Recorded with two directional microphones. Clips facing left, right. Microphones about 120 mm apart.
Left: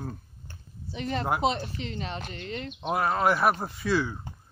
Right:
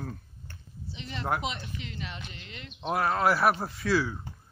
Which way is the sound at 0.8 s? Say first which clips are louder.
Left 5 dB; 50° left (ahead or behind).